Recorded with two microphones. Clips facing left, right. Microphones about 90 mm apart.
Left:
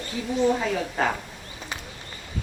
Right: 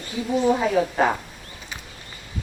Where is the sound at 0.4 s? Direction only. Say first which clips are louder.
Right 3 dB; 10° right (ahead or behind).